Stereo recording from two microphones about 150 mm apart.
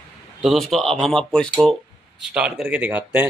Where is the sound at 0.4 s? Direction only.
Centre (ahead or behind).